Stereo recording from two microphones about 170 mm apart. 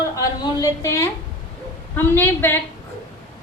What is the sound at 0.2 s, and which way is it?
A woman's voice, 20° left (ahead or behind).